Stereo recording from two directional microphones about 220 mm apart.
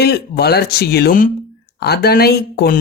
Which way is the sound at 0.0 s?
45° left (ahead or behind).